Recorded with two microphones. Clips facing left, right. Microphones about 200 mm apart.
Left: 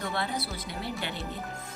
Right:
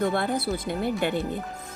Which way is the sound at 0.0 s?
50° right (ahead or behind).